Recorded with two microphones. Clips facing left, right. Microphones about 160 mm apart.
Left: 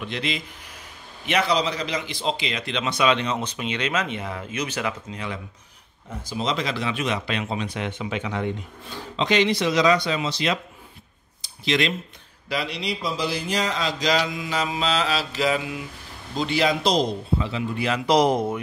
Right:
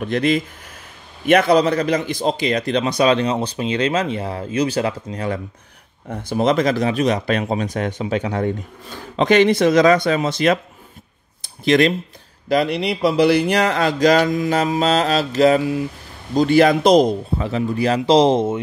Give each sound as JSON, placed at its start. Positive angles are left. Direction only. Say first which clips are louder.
{"t": 0.0, "sound": "speech", "louder": "right 11 dB", "side_deg": -50}
{"t": 6.0, "sound": "speech", "louder": "right 9 dB", "side_deg": -60}